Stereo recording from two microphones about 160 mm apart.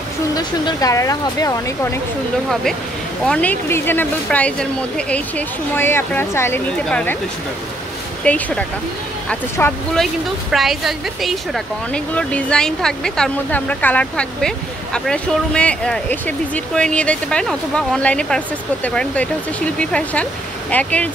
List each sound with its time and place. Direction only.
0.4 s speech: 25° left (ahead or behind)
3.3 s speech: 10° left (ahead or behind)
8.2 s a woman's voice: 10° left (ahead or behind)